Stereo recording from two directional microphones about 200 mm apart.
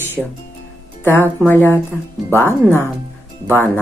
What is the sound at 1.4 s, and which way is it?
Speech, 10° left (ahead or behind).